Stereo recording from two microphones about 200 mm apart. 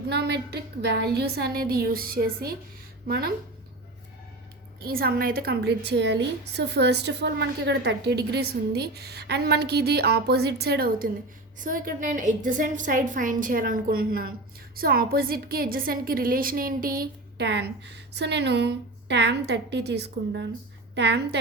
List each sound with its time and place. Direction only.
0.1 s a woman's voice: 55° right (ahead or behind)
4.8 s a woman's voice: 50° right (ahead or behind)